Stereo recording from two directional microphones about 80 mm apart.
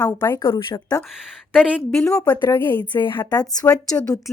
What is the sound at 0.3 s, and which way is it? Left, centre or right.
Speech, left.